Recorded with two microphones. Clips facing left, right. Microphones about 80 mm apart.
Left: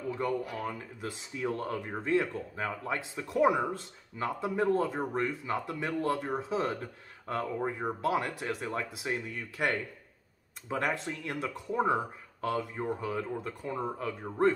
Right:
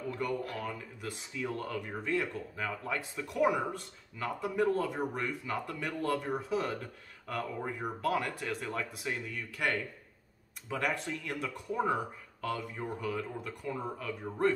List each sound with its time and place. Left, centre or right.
0.2 s speech: left